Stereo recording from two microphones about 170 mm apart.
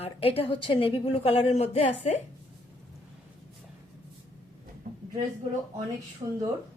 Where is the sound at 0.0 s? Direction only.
35° left (ahead or behind).